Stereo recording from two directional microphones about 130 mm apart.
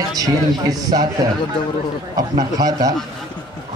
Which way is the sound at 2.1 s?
30° right (ahead or behind).